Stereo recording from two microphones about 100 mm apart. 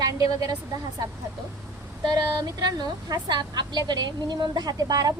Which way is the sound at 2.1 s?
45° right (ahead or behind).